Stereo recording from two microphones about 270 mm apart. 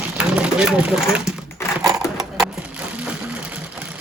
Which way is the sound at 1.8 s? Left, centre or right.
Centre.